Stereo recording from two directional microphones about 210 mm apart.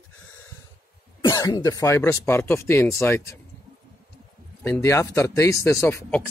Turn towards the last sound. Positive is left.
turn(degrees=10)  # may be behind; listen again after turning